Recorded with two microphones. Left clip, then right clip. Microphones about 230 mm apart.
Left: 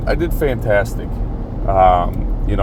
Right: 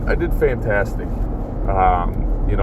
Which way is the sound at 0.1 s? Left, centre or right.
Left.